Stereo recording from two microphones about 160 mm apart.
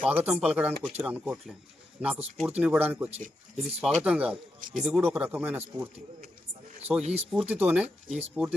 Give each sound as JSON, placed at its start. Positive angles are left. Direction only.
{"t": 0.0, "sound": "speech", "side_deg": -10}
{"t": 7.0, "sound": "speech", "side_deg": -40}
{"t": 7.4, "sound": "speech", "side_deg": -10}